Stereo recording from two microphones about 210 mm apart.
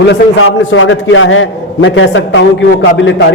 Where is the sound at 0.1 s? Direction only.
70° left (ahead or behind).